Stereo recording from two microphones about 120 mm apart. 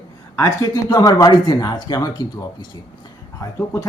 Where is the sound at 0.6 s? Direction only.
30° left (ahead or behind).